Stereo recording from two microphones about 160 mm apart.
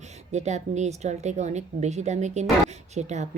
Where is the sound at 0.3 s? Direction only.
45° right (ahead or behind).